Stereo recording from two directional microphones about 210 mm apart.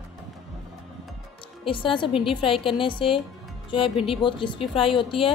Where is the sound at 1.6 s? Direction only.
25° left (ahead or behind).